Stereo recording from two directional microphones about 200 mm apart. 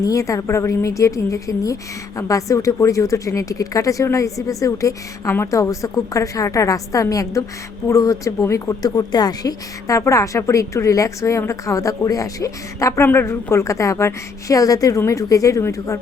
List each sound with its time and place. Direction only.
0.0 s speech: 15° left (ahead or behind)